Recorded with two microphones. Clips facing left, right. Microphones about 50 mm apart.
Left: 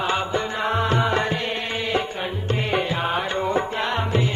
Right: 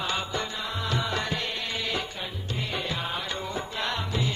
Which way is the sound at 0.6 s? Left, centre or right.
Left.